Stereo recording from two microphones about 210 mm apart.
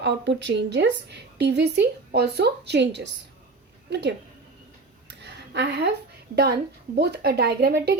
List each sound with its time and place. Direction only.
0.0 s a woman's voice: 55° right (ahead or behind)
5.2 s a sound: 55° right (ahead or behind)
6.3 s a woman's voice: 50° right (ahead or behind)